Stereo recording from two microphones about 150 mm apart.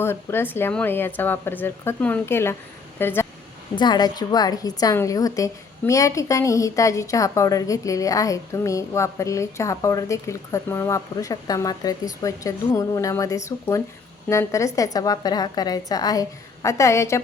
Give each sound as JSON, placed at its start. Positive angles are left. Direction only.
{"t": 0.0, "sound": "speech", "side_deg": 15}
{"t": 3.8, "sound": "a woman's voice", "side_deg": 30}